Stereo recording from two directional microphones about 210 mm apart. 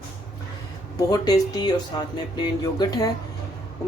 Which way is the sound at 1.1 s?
20° left (ahead or behind).